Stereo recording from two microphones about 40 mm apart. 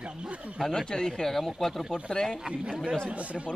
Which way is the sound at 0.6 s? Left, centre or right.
Centre.